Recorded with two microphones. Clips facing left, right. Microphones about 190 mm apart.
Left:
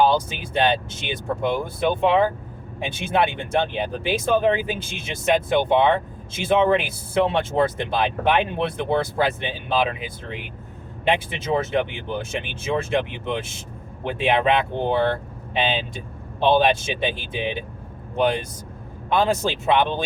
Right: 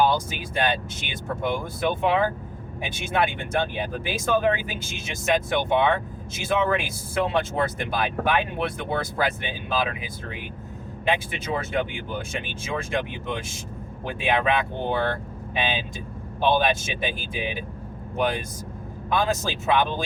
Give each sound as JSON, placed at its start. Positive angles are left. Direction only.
{"t": 0.0, "sound": "speech", "side_deg": 25}